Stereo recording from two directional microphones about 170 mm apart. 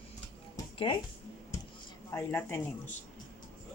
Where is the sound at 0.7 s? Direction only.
30° left (ahead or behind).